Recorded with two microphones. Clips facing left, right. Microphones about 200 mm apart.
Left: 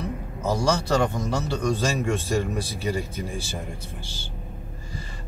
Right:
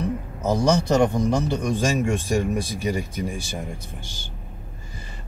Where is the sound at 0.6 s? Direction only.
15° right (ahead or behind).